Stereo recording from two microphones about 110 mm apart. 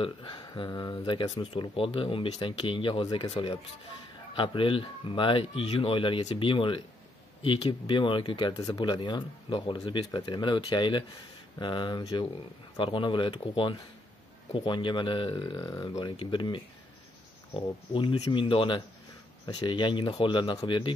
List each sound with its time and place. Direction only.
0.0 s speech: 50° left (ahead or behind)
1.4 s speech: 55° left (ahead or behind)
15.6 s speech: 30° left (ahead or behind); by 20.9 s 45° left (ahead or behind)